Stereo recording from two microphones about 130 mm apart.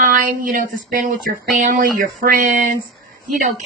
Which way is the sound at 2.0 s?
90° right.